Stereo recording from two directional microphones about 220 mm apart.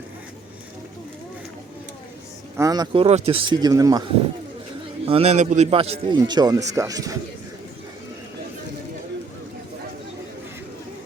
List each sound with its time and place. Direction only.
2.6 s a man's voice: 15° right (ahead or behind)
5.0 s a man's voice: 25° right (ahead or behind)